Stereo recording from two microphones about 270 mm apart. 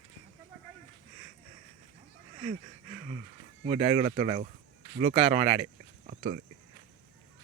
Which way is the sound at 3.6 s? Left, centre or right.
Right.